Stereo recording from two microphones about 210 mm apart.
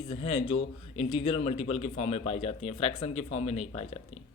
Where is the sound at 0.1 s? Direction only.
30° left (ahead or behind).